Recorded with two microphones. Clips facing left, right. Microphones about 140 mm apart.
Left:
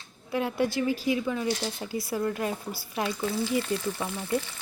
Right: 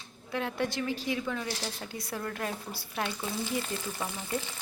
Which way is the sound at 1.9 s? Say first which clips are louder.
Left 8 dB; 5° left (ahead or behind).